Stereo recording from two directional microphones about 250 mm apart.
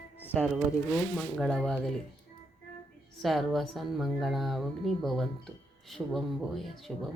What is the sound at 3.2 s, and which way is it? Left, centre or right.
Speech, centre.